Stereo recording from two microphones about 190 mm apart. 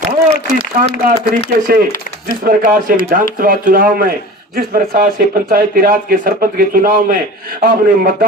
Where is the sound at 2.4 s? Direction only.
50° right (ahead or behind).